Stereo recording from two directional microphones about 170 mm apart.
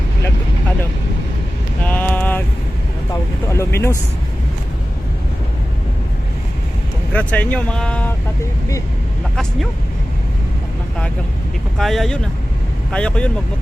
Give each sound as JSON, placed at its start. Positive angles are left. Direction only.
{"t": 1.8, "sound": "a sound", "side_deg": 10}
{"t": 7.1, "sound": "speech", "side_deg": 10}
{"t": 9.3, "sound": "speech", "side_deg": 5}
{"t": 11.8, "sound": "speech", "side_deg": 0}